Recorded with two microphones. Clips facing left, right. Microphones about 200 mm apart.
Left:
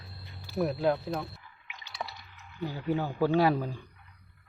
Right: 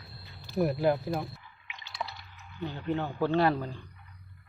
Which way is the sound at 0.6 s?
Centre (ahead or behind).